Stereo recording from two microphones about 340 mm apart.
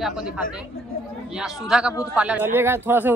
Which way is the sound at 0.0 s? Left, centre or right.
Centre.